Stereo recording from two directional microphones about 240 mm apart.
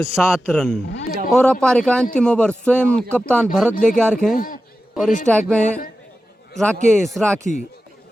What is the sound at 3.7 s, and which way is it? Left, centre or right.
Speech, left.